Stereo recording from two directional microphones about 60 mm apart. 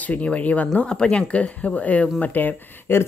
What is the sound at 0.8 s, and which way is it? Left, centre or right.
Speech, centre.